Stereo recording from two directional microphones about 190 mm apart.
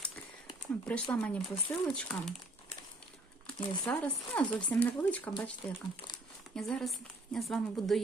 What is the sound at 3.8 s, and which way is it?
Speech, 10° left (ahead or behind).